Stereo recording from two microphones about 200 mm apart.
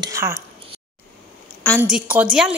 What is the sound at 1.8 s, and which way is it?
Speech, 5° right (ahead or behind).